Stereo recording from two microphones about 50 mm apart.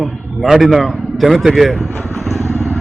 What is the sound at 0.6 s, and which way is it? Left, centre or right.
A man's voice, centre.